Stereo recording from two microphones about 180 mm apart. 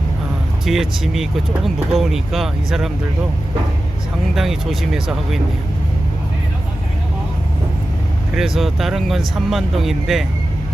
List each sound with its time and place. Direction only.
0.6 s speech: centre (ahead or behind)
4.4 s speech: centre (ahead or behind)
8.4 s speech: centre (ahead or behind)